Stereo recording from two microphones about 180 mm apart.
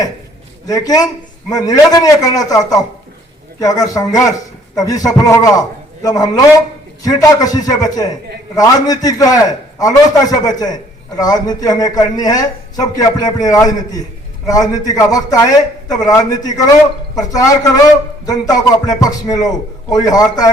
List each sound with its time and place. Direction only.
0.7 s a man's voice: 20° left (ahead or behind)